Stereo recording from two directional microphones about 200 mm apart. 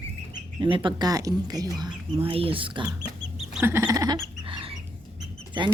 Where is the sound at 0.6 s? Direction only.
25° right (ahead or behind).